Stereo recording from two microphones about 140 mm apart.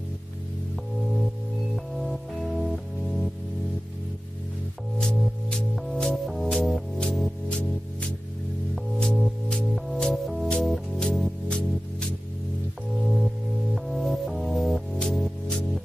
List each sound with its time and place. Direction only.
2.0 s music: centre (ahead or behind)
5.0 s music: centre (ahead or behind)